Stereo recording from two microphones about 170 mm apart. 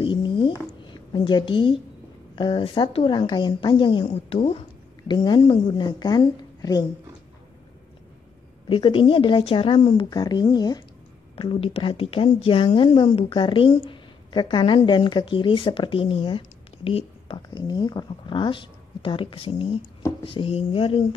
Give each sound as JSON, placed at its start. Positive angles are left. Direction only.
{"t": 0.0, "sound": "a sound", "side_deg": 30}
{"t": 1.1, "sound": "speech", "side_deg": 25}
{"t": 8.6, "sound": "a woman's voice", "side_deg": 30}